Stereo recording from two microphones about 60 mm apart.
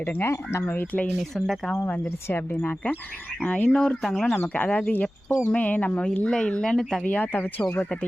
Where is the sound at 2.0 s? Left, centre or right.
Left.